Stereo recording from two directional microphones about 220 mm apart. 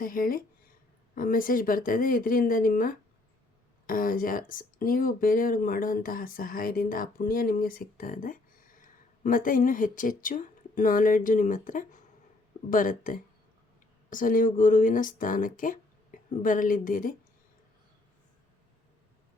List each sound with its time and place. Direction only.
0.0 s speech: 40° left (ahead or behind)